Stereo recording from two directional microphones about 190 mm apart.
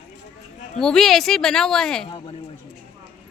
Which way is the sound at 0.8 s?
Centre (ahead or behind).